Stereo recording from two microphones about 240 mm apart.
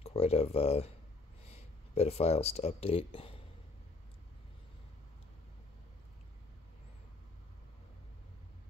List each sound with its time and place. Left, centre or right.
0.0 s speech: left
2.0 s speech: left